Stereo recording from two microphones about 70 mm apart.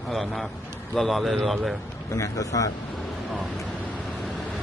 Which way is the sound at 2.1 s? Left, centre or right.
Left.